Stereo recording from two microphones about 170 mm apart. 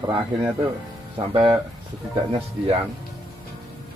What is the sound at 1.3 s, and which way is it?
Speech, 30° right (ahead or behind).